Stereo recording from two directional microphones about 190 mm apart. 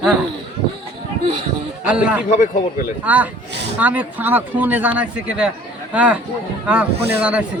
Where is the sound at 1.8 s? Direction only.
5° right (ahead or behind).